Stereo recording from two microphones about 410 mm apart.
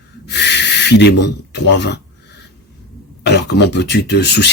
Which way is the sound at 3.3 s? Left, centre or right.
Left.